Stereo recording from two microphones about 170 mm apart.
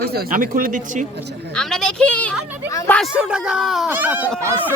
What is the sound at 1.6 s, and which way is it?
Speech, 5° left (ahead or behind).